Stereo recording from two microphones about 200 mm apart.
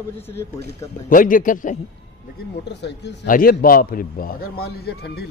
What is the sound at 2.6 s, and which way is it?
Speech, 60° left (ahead or behind).